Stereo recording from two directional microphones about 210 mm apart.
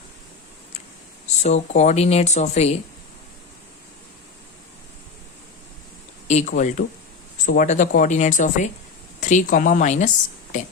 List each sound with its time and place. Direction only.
1.4 s speech: 35° left (ahead or behind)
6.2 s speech: 35° left (ahead or behind)